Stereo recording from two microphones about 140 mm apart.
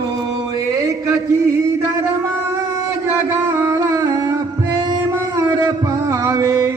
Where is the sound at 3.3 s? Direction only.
25° right (ahead or behind).